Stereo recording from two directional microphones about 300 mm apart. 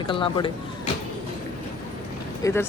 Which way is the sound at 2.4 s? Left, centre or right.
Centre.